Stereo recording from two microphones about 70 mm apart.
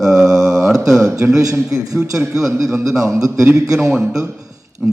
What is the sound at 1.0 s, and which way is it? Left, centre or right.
Speech, right.